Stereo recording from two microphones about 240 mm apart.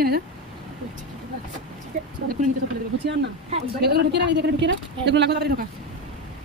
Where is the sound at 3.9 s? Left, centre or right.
Right.